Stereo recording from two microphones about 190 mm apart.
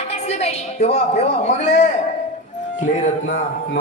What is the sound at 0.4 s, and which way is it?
Music, 35° left (ahead or behind).